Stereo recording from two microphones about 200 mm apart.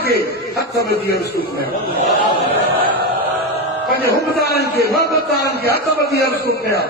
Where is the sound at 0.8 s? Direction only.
50° right (ahead or behind).